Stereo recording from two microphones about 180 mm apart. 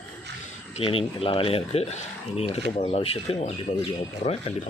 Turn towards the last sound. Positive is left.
turn(degrees=35)  # may be behind; listen again after turning